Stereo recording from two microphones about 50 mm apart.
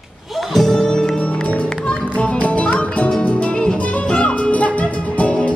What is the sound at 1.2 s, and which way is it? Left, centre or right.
Music, left.